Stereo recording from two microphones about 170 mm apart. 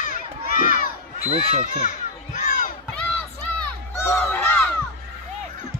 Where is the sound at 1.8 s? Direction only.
45° left (ahead or behind).